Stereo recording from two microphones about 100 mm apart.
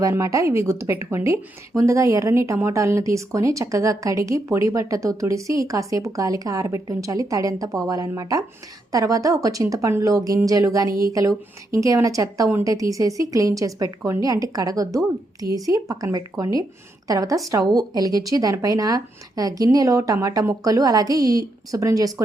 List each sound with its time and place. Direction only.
0.0 s speech: 30° right (ahead or behind)